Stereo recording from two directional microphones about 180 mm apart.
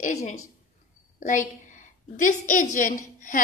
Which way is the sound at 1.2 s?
45° left (ahead or behind).